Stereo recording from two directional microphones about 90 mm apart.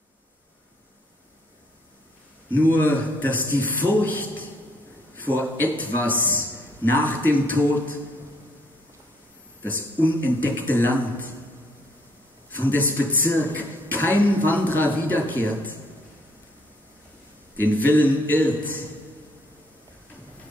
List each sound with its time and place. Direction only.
2.7 s a man's voice: 20° left (ahead or behind)
9.6 s a man's voice: 20° left (ahead or behind)
12.4 s a man's voice: 20° left (ahead or behind)
17.6 s a man's voice: 20° left (ahead or behind)